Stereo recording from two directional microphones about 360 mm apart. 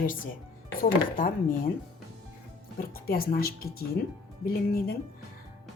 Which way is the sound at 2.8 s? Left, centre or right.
Left.